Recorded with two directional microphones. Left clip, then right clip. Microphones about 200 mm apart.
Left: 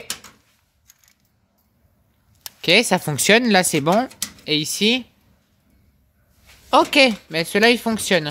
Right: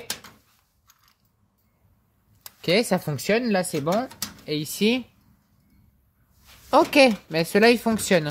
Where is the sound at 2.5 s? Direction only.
5° left (ahead or behind); by 4.5 s 25° left (ahead or behind).